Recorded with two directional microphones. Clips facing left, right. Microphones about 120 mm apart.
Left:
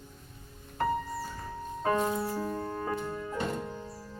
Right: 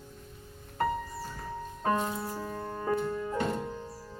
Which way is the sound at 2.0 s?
10° left (ahead or behind).